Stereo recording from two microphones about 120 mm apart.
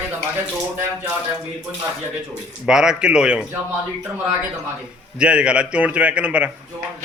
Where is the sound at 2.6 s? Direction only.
5° right (ahead or behind).